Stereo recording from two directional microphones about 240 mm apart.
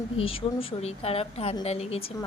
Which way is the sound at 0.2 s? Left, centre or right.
Left.